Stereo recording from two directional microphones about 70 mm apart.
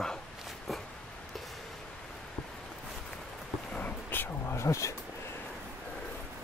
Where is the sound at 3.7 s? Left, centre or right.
Centre.